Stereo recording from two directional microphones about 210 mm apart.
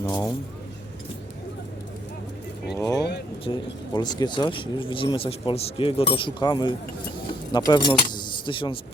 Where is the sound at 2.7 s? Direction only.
15° left (ahead or behind).